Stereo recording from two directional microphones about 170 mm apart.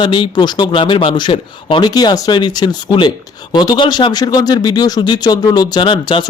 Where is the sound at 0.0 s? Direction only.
30° left (ahead or behind).